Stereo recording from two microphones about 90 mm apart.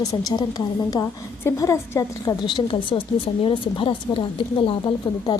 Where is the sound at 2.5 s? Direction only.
65° left (ahead or behind).